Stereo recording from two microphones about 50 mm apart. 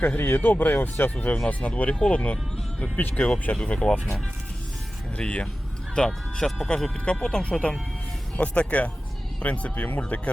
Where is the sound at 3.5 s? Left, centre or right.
Left.